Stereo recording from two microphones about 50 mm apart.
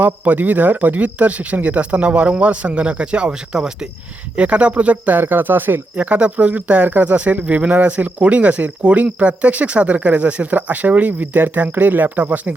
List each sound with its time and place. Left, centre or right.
0.0 s speech: right; by 3.8 s centre
4.4 s speech: right
5.2 s speech: right
6.0 s speech: right